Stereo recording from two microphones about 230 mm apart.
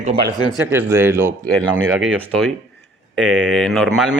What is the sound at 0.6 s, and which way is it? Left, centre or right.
Speech, centre.